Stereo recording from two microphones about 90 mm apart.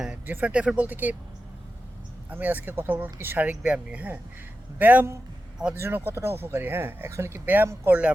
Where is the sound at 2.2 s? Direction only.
20° right (ahead or behind).